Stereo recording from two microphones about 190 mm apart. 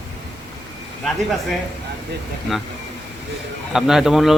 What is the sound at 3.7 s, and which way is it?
Speech, centre (ahead or behind).